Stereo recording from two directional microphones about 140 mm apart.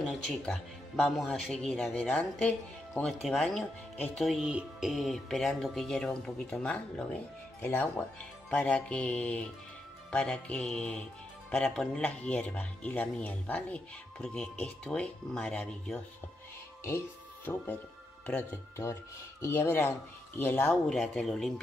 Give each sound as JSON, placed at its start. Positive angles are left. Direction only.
{"t": 0.1, "sound": "speech", "side_deg": 5}
{"t": 18.2, "sound": "speech", "side_deg": 10}
{"t": 20.7, "sound": "speech", "side_deg": 0}